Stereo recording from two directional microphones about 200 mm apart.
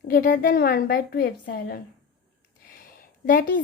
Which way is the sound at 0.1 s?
45° left (ahead or behind).